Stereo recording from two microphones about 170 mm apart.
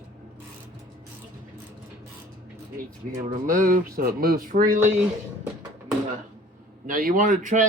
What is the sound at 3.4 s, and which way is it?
Speech, 50° right (ahead or behind).